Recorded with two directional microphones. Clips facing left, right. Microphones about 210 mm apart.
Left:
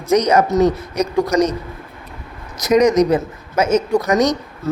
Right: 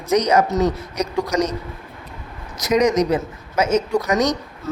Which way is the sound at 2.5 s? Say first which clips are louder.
Left 4 dB; 45° left (ahead or behind).